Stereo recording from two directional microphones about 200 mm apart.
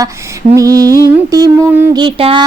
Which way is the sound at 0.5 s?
15° right (ahead or behind).